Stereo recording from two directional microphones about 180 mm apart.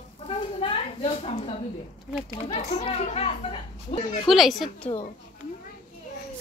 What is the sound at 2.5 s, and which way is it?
A woman's voice, 35° left (ahead or behind).